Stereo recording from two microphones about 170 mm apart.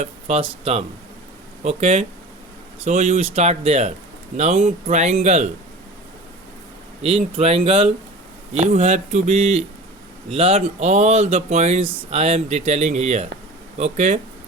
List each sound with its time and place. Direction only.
0.0 s speech: 40° right (ahead or behind)
7.0 s speech: 35° right (ahead or behind)